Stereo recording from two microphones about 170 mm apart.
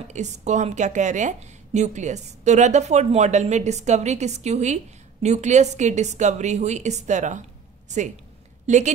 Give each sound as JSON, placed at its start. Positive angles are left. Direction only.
{"t": 0.1, "sound": "a woman's voice", "side_deg": -45}
{"t": 8.6, "sound": "a woman's voice", "side_deg": -45}